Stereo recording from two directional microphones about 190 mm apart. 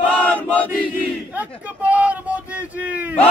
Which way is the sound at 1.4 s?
5° right (ahead or behind).